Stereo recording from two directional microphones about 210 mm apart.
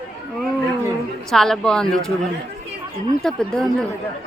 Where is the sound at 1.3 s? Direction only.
Centre (ahead or behind).